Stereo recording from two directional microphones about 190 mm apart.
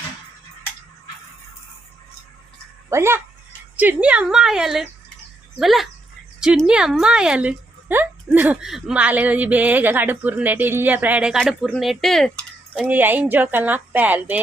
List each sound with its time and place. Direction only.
2.9 s a woman's voice: 15° right (ahead or behind); by 12.9 s centre (ahead or behind)
12.9 s a woman's voice: 10° right (ahead or behind)